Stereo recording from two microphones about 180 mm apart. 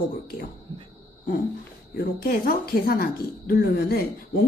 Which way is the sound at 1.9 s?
60° left (ahead or behind).